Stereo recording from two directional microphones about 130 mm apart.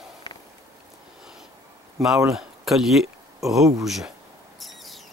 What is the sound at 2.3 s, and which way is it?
Speech, 5° right (ahead or behind).